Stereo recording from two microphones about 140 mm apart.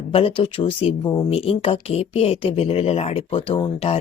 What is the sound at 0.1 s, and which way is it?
Speech, 40° left (ahead or behind).